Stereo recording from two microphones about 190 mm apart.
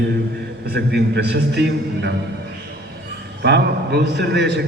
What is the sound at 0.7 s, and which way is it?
A man's voice, 60° right (ahead or behind).